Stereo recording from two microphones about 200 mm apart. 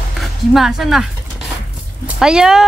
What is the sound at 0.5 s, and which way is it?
Speech, centre (ahead or behind).